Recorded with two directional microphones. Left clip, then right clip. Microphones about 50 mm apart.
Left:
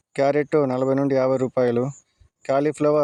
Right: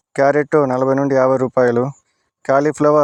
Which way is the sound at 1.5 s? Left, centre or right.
Right.